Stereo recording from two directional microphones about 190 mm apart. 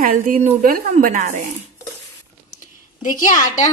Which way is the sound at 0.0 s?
45° right (ahead or behind).